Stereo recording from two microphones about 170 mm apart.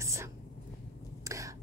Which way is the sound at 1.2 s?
20° right (ahead or behind).